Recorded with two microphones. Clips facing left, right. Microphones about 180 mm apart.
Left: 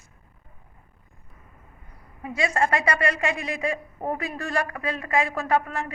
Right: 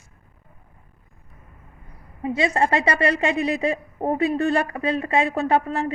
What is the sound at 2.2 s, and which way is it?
A woman's voice, 25° right (ahead or behind).